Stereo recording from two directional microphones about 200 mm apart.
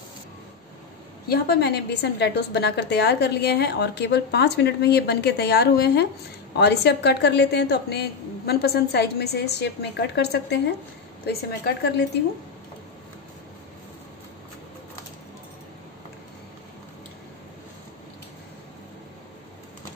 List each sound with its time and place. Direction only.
1.3 s a woman's voice: 55° left (ahead or behind)